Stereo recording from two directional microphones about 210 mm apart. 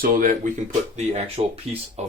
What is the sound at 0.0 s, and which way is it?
Speech, 40° right (ahead or behind).